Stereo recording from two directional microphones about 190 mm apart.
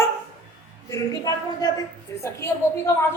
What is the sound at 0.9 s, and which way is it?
A woman's voice, 20° left (ahead or behind).